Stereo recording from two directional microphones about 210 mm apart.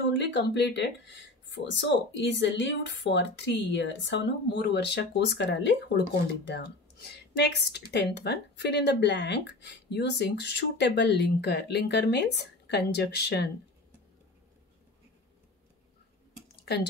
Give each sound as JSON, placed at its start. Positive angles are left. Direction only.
{"t": 0.2, "sound": "speech", "side_deg": 55}